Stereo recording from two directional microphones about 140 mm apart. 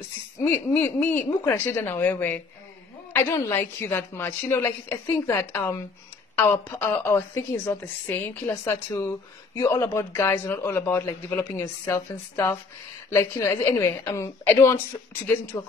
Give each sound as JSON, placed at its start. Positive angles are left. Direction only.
{"t": 0.4, "sound": "a woman's voice", "side_deg": 15}